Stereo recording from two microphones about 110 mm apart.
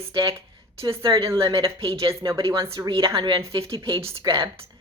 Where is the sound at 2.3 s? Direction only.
45° right (ahead or behind).